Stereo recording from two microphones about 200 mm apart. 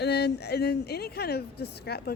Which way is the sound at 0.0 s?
55° left (ahead or behind).